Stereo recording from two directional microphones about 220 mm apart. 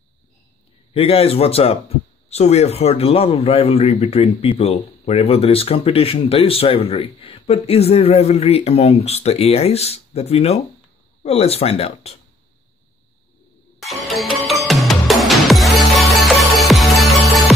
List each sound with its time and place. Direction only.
0.9 s a man's voice: 25° left (ahead or behind)
13.7 s music: centre (ahead or behind)